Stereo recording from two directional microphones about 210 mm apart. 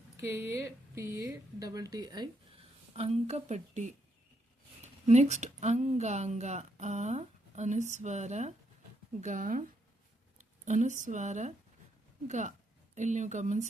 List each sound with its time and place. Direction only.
0.2 s speech: 15° right (ahead or behind); by 3.9 s 35° right (ahead or behind)
5.0 s a woman's voice: 35° right (ahead or behind)